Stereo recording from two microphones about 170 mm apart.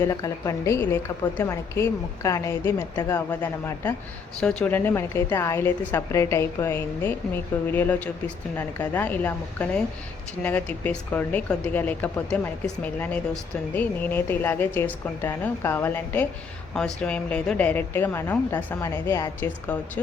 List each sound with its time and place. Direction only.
0.0 s a woman's voice: 20° left (ahead or behind)